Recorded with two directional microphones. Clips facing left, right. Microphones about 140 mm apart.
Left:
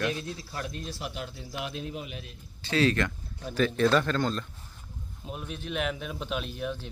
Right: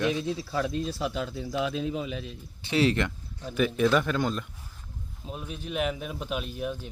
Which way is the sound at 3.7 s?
10° right (ahead or behind).